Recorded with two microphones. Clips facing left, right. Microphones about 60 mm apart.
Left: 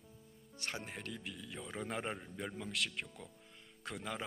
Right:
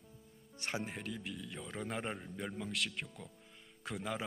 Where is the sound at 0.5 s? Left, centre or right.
Right.